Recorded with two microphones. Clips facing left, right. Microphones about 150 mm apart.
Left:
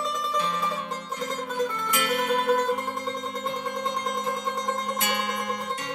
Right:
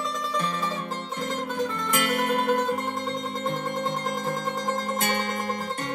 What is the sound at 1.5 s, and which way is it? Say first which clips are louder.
Music: left 1 dB; 50° right (ahead or behind).